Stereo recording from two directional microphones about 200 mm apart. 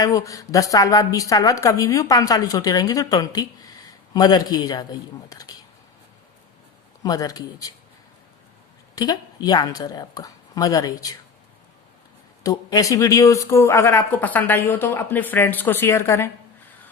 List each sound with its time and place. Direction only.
0.0 s a woman's voice: 15° left (ahead or behind)
7.0 s speech: 20° left (ahead or behind)
9.0 s a woman's voice: 20° left (ahead or behind)
12.4 s speech: 15° left (ahead or behind)